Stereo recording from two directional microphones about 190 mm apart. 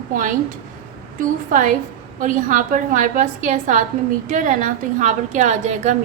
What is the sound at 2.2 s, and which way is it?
A woman's voice, 45° right (ahead or behind).